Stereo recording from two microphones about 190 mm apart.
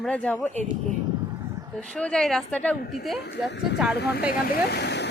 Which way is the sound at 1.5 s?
15° right (ahead or behind).